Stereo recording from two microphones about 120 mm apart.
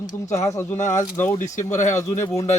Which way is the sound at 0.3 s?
25° left (ahead or behind).